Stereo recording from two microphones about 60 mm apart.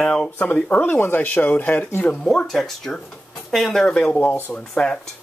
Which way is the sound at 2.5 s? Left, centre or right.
Centre.